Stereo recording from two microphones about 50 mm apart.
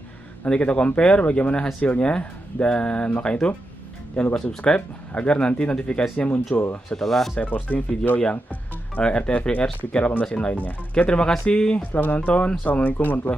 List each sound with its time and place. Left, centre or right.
0.5 s speech: left
6.1 s speech: left
7.0 s speech: centre
7.7 s speech: left
8.9 s speech: left
11.9 s speech: left